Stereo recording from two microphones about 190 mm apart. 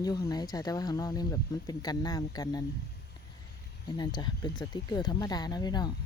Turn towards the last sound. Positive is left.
turn(degrees=20)  # may be behind; listen again after turning